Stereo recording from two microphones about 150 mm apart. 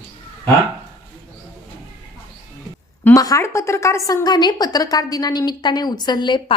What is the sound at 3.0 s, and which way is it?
A woman's voice, 20° left (ahead or behind).